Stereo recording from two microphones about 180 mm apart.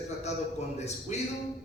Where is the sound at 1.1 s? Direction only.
40° left (ahead or behind).